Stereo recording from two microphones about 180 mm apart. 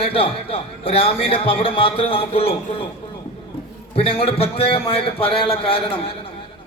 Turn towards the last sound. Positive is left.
turn(degrees=30)  # may be behind; listen again after turning